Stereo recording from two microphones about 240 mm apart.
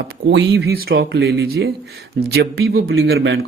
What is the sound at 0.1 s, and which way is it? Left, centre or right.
Speech, right.